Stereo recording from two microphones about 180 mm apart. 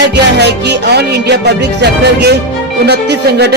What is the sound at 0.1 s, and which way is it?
Speech, 70° right (ahead or behind).